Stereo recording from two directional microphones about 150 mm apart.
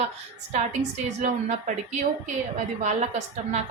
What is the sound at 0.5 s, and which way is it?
A woman's voice, 50° right (ahead or behind).